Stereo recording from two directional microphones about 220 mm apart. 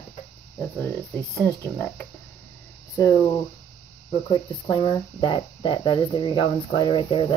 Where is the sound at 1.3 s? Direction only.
10° left (ahead or behind).